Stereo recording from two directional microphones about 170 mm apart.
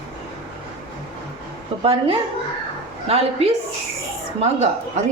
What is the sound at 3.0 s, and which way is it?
A woman's voice, 40° right (ahead or behind).